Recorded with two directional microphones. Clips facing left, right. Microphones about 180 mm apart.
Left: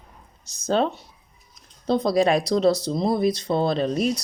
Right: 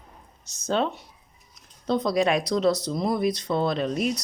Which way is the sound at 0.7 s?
35° left (ahead or behind).